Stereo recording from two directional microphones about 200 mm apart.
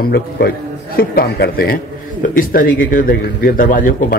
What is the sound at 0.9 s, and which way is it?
Speech, 50° left (ahead or behind).